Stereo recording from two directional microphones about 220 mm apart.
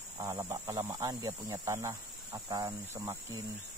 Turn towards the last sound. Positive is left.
turn(degrees=-15)  # may be behind; listen again after turning